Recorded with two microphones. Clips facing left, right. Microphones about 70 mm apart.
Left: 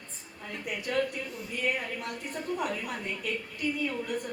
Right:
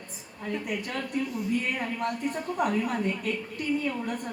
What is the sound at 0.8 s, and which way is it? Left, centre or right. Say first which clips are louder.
A woman's voice: left 1 dB; right.